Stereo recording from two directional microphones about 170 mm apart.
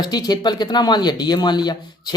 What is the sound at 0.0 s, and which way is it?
Speech, 25° left (ahead or behind).